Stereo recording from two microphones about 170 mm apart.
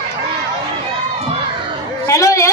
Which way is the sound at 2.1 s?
15° left (ahead or behind).